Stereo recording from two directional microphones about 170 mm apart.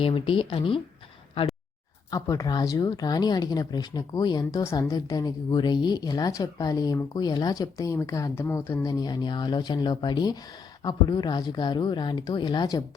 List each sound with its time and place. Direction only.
0.0 s speech: 30° left (ahead or behind)
2.0 s speech: 20° left (ahead or behind)